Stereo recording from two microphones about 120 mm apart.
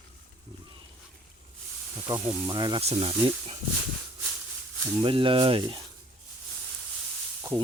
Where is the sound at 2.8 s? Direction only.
55° right (ahead or behind).